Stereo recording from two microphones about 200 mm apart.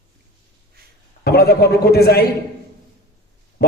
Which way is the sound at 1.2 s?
50° left (ahead or behind).